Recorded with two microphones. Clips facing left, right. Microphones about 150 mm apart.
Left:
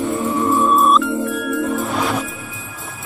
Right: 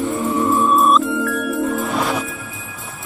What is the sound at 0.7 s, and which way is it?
Music, centre (ahead or behind).